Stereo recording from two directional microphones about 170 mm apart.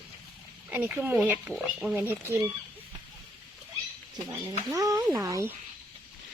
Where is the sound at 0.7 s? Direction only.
10° right (ahead or behind).